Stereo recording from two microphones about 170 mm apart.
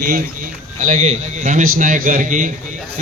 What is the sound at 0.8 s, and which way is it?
A man's voice, 45° right (ahead or behind).